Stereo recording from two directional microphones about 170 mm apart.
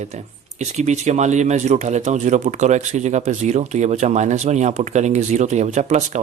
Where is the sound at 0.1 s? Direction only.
40° right (ahead or behind).